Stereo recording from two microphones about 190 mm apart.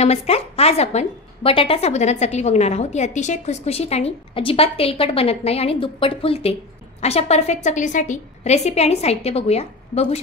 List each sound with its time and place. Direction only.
0.0 s a woman's voice: 35° left (ahead or behind)